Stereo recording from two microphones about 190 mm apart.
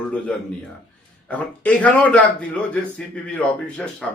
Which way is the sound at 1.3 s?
5° left (ahead or behind).